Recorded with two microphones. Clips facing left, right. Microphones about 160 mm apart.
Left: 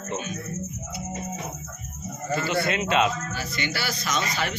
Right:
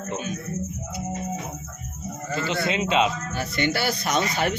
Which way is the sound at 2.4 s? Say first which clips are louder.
Right 1 dB; 20° right (ahead or behind).